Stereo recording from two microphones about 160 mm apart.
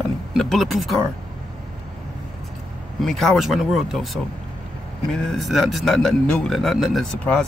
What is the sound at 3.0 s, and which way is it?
Speech, centre (ahead or behind).